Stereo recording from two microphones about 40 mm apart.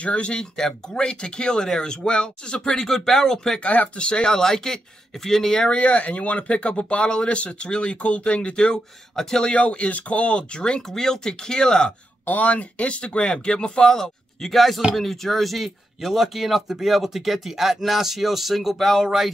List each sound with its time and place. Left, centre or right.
0.0 s speech: left
2.8 s speech: centre
3.6 s speech: left
4.0 s speech: left
5.7 s speech: left
9.1 s speech: centre
9.4 s speech: left
12.3 s speech: left; by 14.5 s centre
14.5 s speech: centre